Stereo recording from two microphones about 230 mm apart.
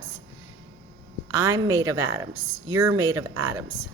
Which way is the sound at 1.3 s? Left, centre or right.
Centre.